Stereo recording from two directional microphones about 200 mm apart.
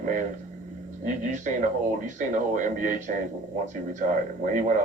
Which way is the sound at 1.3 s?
40° right (ahead or behind).